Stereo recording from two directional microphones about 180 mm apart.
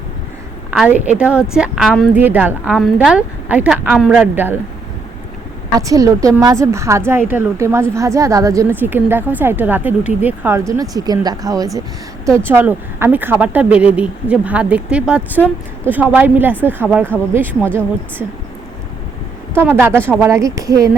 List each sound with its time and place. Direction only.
0.7 s a woman's voice: 5° right (ahead or behind)
5.7 s a woman's voice: 20° right (ahead or behind)
19.5 s a woman's voice: 10° right (ahead or behind)